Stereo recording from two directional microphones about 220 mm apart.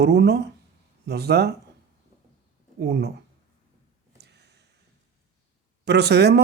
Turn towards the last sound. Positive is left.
turn(degrees=-50)  # may be behind; listen again after turning